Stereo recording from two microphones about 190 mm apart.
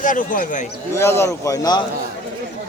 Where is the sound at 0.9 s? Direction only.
15° left (ahead or behind).